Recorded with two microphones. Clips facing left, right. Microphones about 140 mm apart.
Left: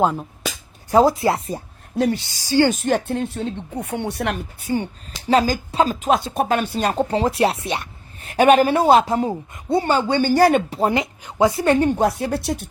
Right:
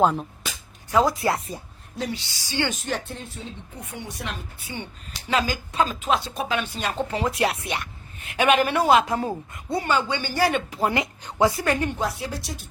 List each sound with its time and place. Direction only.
0.0 s speech: 5° left (ahead or behind)
0.9 s a woman's voice: 30° left (ahead or behind)
2.0 s speech: 50° left (ahead or behind)
4.6 s a woman's voice: 40° left (ahead or behind)
9.1 s a woman's voice: 20° left (ahead or behind); by 10.6 s 45° left (ahead or behind)
10.7 s a woman's voice: 25° left (ahead or behind)
11.9 s speech: 55° left (ahead or behind)